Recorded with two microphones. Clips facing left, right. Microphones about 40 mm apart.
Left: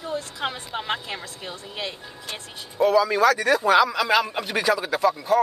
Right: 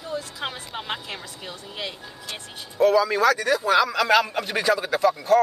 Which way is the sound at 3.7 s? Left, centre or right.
Centre.